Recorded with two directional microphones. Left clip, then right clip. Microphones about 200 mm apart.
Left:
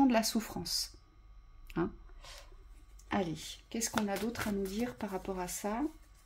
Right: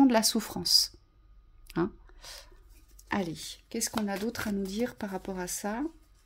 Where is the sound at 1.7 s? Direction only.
40° right (ahead or behind).